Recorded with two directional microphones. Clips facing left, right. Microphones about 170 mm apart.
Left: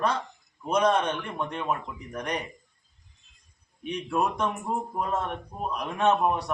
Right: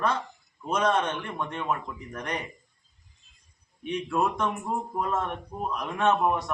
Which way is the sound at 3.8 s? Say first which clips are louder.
Right 1 dB; 15° left (ahead or behind).